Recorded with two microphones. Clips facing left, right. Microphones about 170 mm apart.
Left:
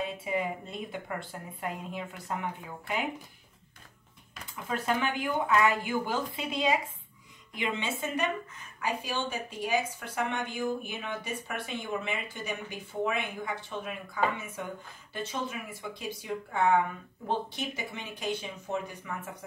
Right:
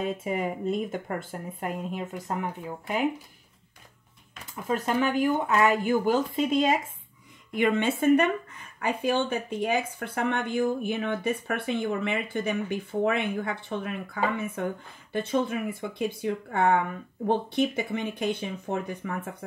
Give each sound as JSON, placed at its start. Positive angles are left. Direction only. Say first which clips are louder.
{"t": 0.0, "sound": "speech", "louder": "right 3 dB", "side_deg": -45}
{"t": 4.7, "sound": "speech", "louder": "right 5 dB", "side_deg": -45}